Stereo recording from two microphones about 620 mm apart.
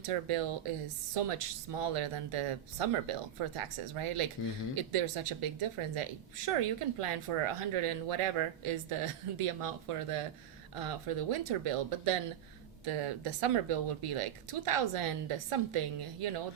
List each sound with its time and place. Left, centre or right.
0.0 s speech: right